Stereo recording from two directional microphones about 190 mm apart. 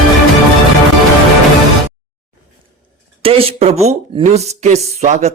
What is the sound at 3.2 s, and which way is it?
Speech, 30° right (ahead or behind).